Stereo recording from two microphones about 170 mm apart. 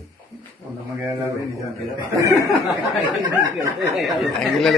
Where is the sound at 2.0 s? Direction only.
20° right (ahead or behind).